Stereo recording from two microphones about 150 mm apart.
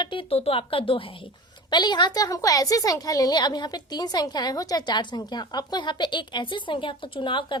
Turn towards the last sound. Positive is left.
turn(degrees=35)  # may be behind; listen again after turning